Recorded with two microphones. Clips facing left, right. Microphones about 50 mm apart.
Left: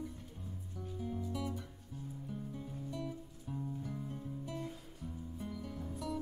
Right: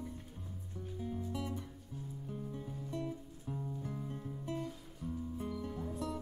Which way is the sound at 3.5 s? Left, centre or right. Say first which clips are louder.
Even; centre.